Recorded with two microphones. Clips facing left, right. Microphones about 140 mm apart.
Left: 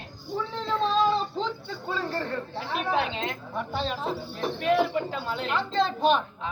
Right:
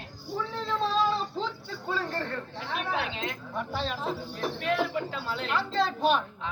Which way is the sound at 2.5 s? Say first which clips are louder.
Left 5 dB; 30° left (ahead or behind).